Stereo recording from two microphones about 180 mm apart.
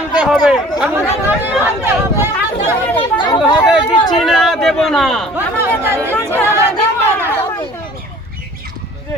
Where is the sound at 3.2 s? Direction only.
25° left (ahead or behind).